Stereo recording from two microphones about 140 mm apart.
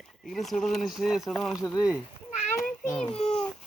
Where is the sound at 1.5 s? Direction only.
25° left (ahead or behind).